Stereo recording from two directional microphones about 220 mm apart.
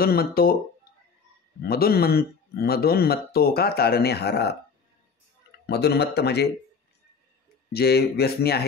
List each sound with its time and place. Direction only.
0.0 s speech: 45° left (ahead or behind)
1.7 s speech: 45° left (ahead or behind)
5.7 s speech: 50° left (ahead or behind)
7.7 s speech: 45° left (ahead or behind)